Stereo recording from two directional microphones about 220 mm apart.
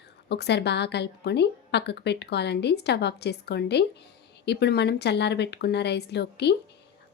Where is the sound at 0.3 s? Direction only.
50° left (ahead or behind).